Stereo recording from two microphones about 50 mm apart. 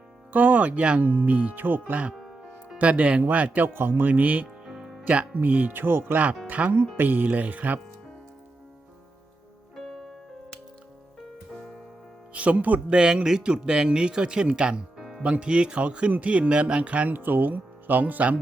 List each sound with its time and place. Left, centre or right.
0.3 s speech: right
1.9 s speech: right
2.1 s music: centre
2.7 s speech: right
4.1 s speech: right
4.6 s music: centre
5.0 s speech: right
6.5 s speech: right
9.7 s music: centre
12.3 s speech: right
12.9 s speech: centre
17.1 s speech: right